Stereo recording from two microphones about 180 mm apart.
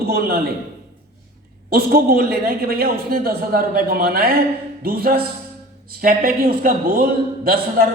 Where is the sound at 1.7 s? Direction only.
55° right (ahead or behind).